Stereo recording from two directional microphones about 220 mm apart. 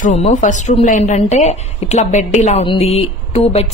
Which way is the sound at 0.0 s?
30° left (ahead or behind).